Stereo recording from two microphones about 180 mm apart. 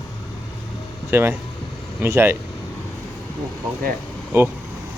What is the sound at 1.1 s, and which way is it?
Speech, 15° right (ahead or behind).